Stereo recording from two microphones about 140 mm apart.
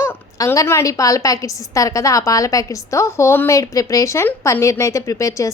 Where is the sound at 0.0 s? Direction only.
20° left (ahead or behind).